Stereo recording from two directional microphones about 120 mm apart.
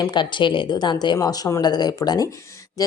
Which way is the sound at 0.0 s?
40° left (ahead or behind).